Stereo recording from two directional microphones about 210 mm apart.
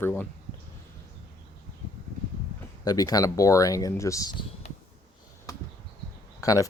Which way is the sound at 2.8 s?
15° left (ahead or behind).